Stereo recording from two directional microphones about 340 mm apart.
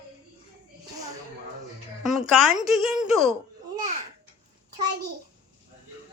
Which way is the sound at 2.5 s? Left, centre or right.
Centre.